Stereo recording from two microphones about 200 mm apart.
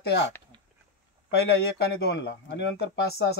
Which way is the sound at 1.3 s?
55° left (ahead or behind).